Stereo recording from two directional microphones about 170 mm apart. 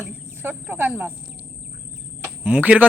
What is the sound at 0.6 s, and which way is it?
Speech, 10° right (ahead or behind).